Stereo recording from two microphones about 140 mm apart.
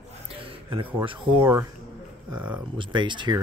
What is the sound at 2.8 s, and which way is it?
Speech, 35° right (ahead or behind).